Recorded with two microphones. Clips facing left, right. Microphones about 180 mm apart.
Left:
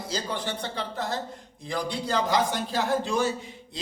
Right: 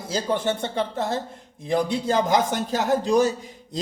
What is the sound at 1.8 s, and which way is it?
A man's voice, 50° right (ahead or behind).